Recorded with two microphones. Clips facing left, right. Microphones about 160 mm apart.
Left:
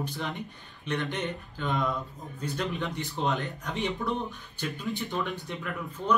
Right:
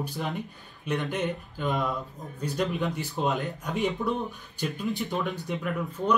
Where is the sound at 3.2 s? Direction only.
40° right (ahead or behind).